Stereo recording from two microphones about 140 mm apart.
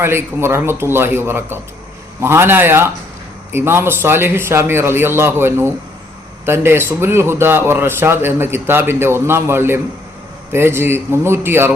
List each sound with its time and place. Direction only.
0.0 s speech: 15° right (ahead or behind)